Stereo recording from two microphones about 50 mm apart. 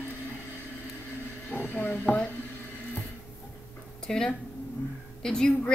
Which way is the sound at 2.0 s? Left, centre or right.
Left.